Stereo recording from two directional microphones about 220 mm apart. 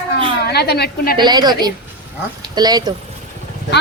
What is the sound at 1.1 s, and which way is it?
A woman's voice, 20° right (ahead or behind).